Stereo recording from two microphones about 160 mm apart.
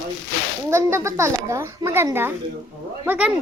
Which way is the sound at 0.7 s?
15° right (ahead or behind).